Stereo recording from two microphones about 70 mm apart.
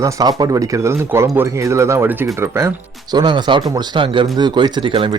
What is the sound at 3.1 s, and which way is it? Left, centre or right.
Speech, right.